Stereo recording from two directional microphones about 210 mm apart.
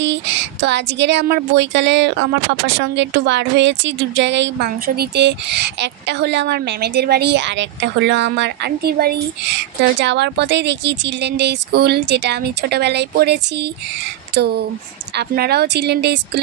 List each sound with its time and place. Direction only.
0.0 s speech: 60° right (ahead or behind)
15.1 s speech: 50° right (ahead or behind)